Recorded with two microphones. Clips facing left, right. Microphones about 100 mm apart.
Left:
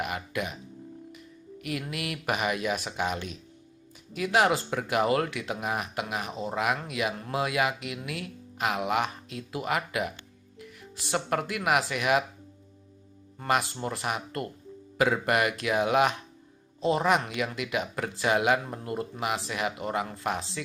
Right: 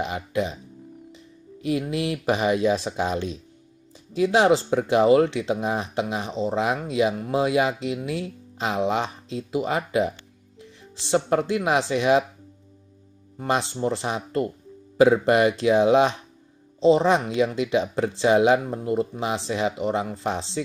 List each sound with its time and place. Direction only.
0.0 s speech: 25° right (ahead or behind)
13.5 s speech: 25° right (ahead or behind)